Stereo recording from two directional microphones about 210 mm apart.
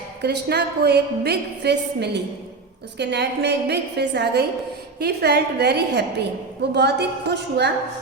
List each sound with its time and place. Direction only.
0.2 s a woman's voice: 50° right (ahead or behind)